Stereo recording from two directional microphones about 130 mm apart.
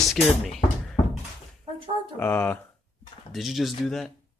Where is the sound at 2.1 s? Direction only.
10° left (ahead or behind).